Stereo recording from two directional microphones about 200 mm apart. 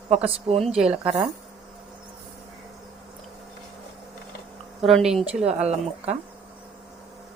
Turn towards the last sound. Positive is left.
turn(degrees=-35)  # may be behind; listen again after turning